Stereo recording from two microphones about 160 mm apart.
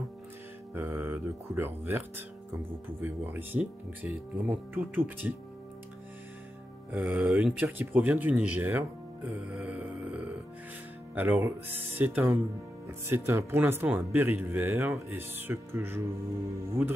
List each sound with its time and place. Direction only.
0.7 s speech: 20° right (ahead or behind)
6.9 s speech: 5° right (ahead or behind)